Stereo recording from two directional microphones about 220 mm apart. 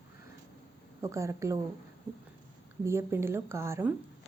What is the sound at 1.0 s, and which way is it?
Speech, 15° right (ahead or behind).